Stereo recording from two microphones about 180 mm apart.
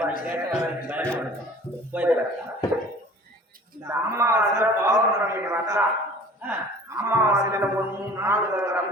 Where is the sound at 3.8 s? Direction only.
15° right (ahead or behind).